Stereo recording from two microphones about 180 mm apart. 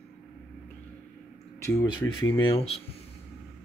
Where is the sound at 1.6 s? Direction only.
15° left (ahead or behind).